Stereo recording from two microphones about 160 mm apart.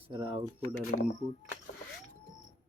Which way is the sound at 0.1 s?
30° right (ahead or behind).